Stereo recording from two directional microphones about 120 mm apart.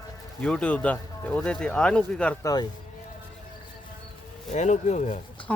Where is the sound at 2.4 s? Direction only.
30° left (ahead or behind).